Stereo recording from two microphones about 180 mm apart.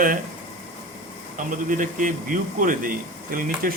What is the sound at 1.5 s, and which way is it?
A man's voice, 50° right (ahead or behind).